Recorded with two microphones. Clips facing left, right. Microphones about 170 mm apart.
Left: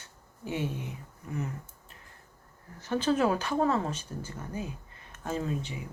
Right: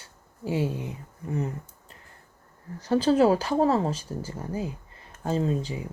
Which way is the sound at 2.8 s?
35° right (ahead or behind).